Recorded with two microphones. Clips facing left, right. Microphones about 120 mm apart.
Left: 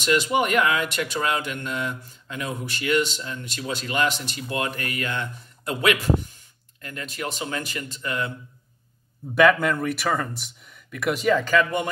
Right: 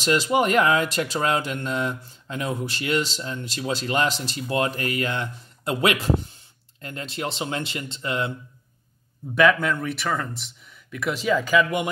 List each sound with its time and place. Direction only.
0.0 s speech: 30° right (ahead or behind)
9.3 s speech: centre (ahead or behind)